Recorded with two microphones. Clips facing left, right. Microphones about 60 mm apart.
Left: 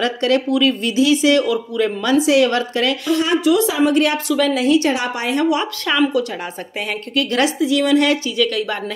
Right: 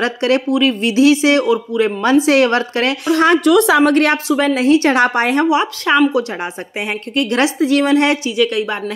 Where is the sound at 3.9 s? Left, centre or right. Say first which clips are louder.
Right 3 dB; right.